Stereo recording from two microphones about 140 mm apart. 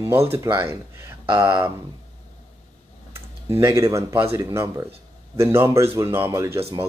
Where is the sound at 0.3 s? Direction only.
15° right (ahead or behind).